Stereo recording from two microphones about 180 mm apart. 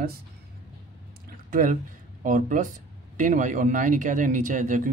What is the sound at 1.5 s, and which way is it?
Speech, 45° right (ahead or behind).